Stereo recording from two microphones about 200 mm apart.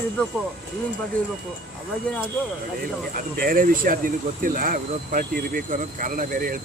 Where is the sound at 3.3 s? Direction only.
45° right (ahead or behind).